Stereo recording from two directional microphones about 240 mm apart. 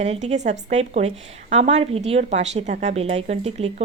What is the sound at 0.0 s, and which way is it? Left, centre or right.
Speech, right.